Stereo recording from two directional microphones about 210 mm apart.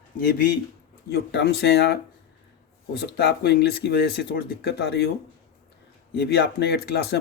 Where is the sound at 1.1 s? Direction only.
55° left (ahead or behind).